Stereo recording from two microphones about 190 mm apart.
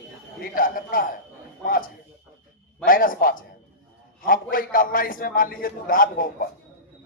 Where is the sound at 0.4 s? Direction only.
50° left (ahead or behind).